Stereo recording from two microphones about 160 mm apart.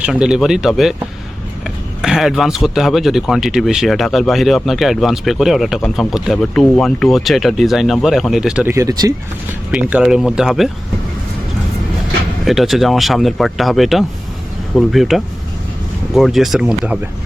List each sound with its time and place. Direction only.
0.0 s speech: 5° right (ahead or behind)
8.7 s speech: 20° right (ahead or behind)
9.7 s speech: 5° right (ahead or behind)
12.5 s speech: centre (ahead or behind)